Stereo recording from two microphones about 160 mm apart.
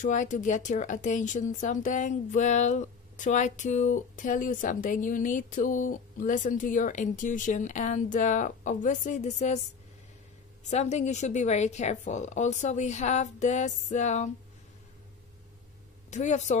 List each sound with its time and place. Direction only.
0.0 s speech: 50° left (ahead or behind)
10.7 s speech: 45° left (ahead or behind)
16.1 s speech: 45° left (ahead or behind)